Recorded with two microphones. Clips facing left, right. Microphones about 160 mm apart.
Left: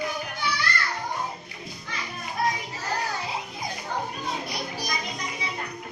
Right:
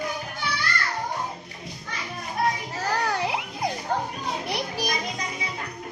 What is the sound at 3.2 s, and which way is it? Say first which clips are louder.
Music: right 5 dB; 70° right (ahead or behind).